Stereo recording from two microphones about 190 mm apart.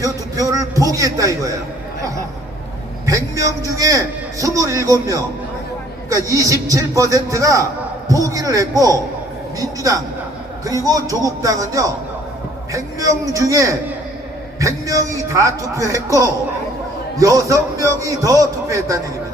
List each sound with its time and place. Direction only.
0.3 s a man's voice: 15° right (ahead or behind)
3.1 s a man's voice: 15° right (ahead or behind)